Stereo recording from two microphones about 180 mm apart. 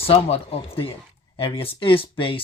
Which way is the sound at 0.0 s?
35° left (ahead or behind).